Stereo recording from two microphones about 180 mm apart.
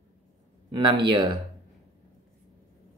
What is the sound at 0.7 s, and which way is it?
Speech, 25° right (ahead or behind).